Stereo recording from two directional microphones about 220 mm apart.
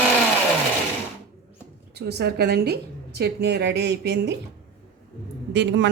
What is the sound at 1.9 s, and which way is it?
A woman's voice, 50° right (ahead or behind).